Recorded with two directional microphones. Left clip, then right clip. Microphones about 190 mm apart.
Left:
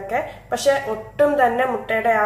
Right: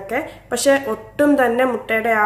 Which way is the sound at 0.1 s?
50° right (ahead or behind).